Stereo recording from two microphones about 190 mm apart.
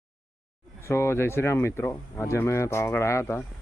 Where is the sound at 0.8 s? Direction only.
15° left (ahead or behind).